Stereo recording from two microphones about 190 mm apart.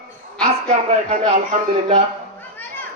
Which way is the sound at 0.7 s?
30° right (ahead or behind).